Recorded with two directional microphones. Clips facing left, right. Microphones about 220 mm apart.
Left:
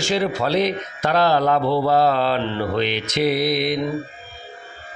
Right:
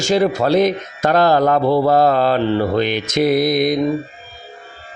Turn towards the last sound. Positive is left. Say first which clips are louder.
# right 5 dB
turn(degrees=-45)  # may be behind; listen again after turning